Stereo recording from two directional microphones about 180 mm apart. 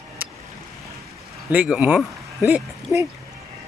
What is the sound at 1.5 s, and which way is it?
Speech, 10° right (ahead or behind).